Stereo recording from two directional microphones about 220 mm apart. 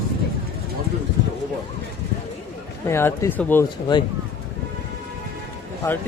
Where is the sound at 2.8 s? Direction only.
10° left (ahead or behind).